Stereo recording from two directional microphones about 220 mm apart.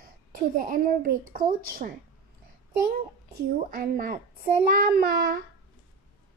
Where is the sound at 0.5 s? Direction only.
40° right (ahead or behind).